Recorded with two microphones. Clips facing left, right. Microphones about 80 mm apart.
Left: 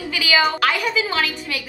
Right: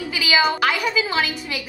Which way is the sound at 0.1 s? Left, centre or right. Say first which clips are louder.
Left 1 dB; centre.